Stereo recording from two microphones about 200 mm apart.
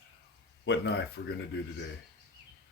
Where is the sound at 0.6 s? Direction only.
65° left (ahead or behind).